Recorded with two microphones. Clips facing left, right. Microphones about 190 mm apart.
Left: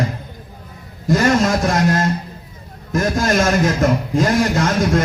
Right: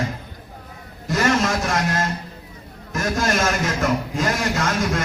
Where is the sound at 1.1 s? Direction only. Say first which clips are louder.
Left 5 dB; 35° left (ahead or behind).